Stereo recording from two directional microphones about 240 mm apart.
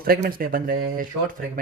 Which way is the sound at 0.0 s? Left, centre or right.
Right.